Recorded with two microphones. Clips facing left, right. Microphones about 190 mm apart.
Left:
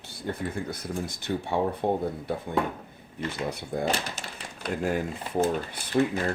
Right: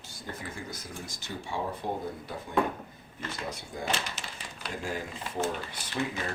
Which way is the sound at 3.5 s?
60° left (ahead or behind).